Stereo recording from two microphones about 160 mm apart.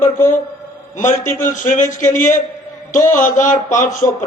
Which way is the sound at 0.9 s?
50° left (ahead or behind).